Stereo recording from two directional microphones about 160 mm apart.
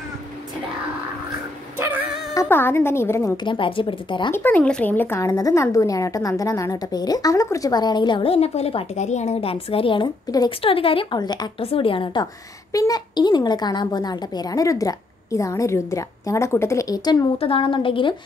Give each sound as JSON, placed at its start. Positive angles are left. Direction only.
{"t": 1.8, "sound": "dog", "side_deg": -10}
{"t": 2.4, "sound": "a woman's voice", "side_deg": 15}
{"t": 3.4, "sound": "speech", "side_deg": 30}
{"t": 4.3, "sound": "a woman's voice", "side_deg": 10}